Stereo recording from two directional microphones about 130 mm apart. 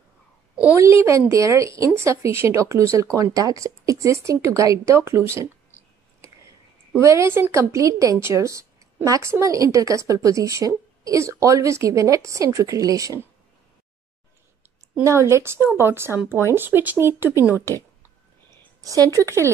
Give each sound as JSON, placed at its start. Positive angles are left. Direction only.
{"t": 1.3, "sound": "a woman's voice", "side_deg": -25}
{"t": 7.0, "sound": "a woman's voice", "side_deg": -20}
{"t": 15.0, "sound": "a woman's voice", "side_deg": -20}